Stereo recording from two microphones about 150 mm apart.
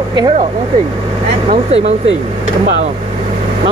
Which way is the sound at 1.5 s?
45° right (ahead or behind).